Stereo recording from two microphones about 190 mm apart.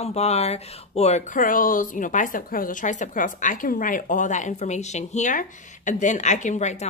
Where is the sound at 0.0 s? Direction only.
35° left (ahead or behind).